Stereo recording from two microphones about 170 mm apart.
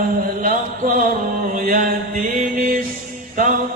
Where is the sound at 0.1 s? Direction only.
55° right (ahead or behind).